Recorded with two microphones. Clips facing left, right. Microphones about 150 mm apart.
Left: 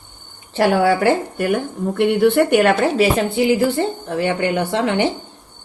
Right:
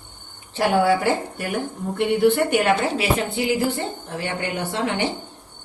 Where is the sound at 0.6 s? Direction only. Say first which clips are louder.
Left 3 dB; 85° left.